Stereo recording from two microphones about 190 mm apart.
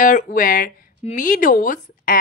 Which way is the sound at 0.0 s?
45° left (ahead or behind).